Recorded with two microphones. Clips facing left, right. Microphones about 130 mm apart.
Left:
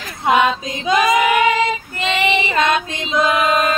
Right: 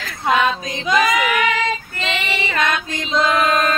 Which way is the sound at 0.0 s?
20° left (ahead or behind).